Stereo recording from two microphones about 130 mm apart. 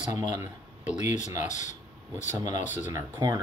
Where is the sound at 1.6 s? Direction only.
70° left (ahead or behind).